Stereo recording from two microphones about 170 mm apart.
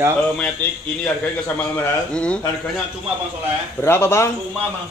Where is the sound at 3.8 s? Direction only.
15° left (ahead or behind).